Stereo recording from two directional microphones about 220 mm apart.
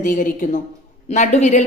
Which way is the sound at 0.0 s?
40° left (ahead or behind).